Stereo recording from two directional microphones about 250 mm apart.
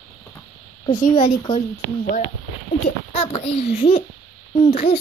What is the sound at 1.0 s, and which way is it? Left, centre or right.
A child's voice, left.